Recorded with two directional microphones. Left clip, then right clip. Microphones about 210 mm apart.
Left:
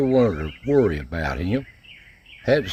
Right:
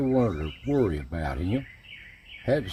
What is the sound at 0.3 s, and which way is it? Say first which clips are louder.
Speech: left 6 dB; 45° left (ahead or behind).